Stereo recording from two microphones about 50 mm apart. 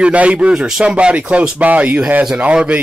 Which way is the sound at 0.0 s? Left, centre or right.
Right.